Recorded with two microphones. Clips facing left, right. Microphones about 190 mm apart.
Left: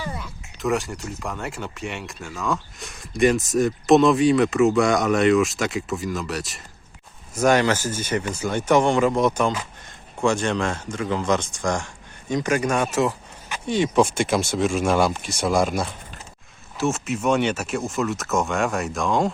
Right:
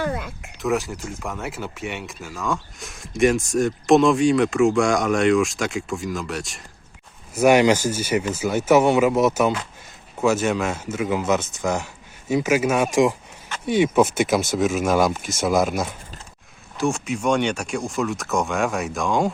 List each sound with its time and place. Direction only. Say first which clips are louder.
0.0 s speech: right 7 dB; 55° right (ahead or behind)
0.6 s speech: right 1 dB; centre (ahead or behind)
7.3 s speech: right 3 dB; 10° right (ahead or behind)